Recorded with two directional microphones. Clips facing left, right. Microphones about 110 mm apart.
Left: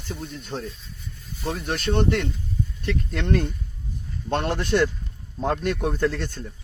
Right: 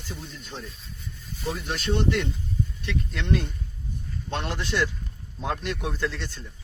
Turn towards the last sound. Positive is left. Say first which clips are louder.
# left 6 dB
turn(degrees=50)  # may be behind; listen again after turning